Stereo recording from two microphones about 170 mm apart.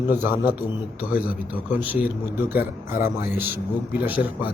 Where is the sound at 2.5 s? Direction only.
65° left (ahead or behind).